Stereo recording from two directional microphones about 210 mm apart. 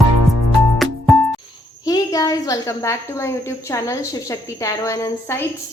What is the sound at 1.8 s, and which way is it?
A woman's voice, 15° left (ahead or behind).